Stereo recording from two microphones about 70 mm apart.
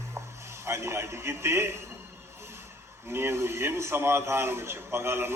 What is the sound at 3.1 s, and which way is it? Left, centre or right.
A man's voice, right.